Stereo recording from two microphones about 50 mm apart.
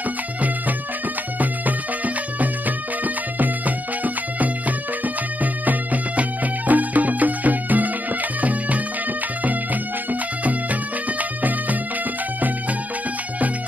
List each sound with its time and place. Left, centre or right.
1.4 s music: right
10.4 s music: right